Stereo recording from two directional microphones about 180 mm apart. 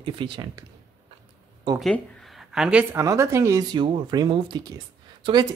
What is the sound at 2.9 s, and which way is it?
Speech, 15° right (ahead or behind).